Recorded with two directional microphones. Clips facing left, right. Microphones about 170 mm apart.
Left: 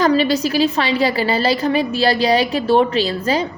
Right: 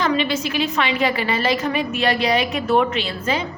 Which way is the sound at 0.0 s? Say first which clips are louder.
Left 5 dB; 40° left (ahead or behind).